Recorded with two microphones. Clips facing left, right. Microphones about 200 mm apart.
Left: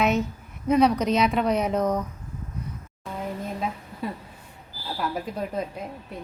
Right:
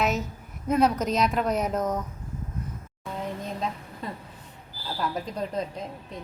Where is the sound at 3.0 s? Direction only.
10° left (ahead or behind).